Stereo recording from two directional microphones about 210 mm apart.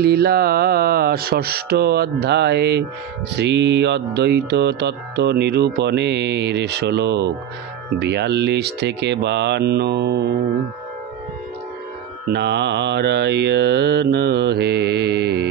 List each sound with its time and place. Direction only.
0.0 s music: 50° right (ahead or behind)
12.3 s music: 55° right (ahead or behind)